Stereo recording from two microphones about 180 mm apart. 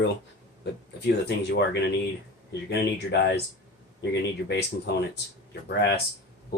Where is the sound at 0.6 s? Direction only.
70° left (ahead or behind).